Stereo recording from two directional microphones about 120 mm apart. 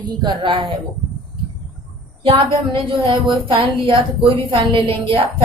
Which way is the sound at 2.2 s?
45° right (ahead or behind).